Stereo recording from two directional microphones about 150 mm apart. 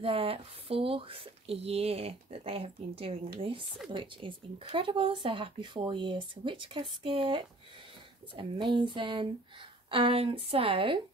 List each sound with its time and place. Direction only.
0.0 s speech: 40° right (ahead or behind)